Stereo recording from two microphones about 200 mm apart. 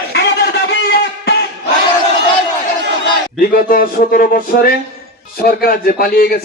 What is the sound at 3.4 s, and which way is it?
A man's voice, 45° left (ahead or behind).